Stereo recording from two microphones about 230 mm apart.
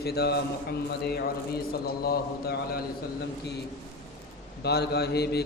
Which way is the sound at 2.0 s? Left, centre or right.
Left.